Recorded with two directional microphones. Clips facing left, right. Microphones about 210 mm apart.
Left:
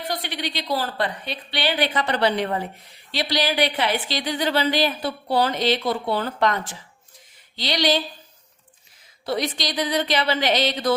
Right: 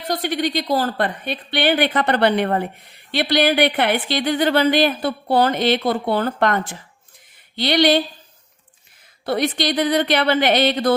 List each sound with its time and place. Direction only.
0.1 s a woman's voice: 45° right (ahead or behind)
9.2 s a woman's voice: 60° right (ahead or behind)